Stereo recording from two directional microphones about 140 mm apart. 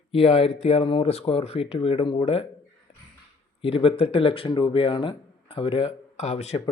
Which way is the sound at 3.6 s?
40° left (ahead or behind).